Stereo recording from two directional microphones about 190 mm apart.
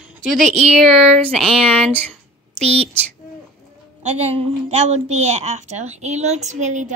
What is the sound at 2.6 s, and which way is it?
Speech, 35° right (ahead or behind).